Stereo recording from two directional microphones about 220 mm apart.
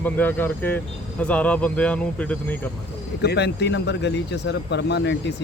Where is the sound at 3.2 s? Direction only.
50° left (ahead or behind).